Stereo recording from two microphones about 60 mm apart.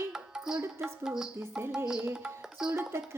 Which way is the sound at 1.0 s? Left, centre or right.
Centre.